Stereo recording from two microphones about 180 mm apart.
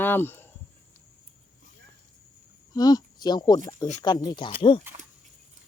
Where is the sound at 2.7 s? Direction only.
20° left (ahead or behind).